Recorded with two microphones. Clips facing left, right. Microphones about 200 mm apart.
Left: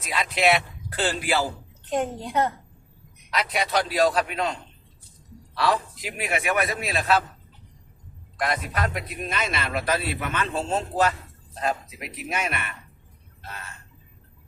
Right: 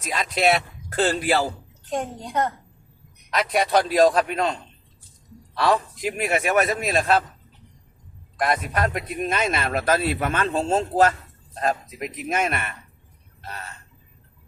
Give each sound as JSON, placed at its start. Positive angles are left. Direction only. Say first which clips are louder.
{"t": 0.0, "sound": "speech", "louder": "right 1 dB", "side_deg": -40}
{"t": 1.9, "sound": "a woman's voice", "louder": "left 2 dB", "side_deg": 5}
{"t": 3.2, "sound": "a man's voice", "louder": "right 4 dB", "side_deg": -50}
{"t": 5.6, "sound": "a man's voice", "louder": "right 3 dB", "side_deg": -45}
{"t": 8.4, "sound": "a man's voice", "louder": "right 4 dB", "side_deg": -50}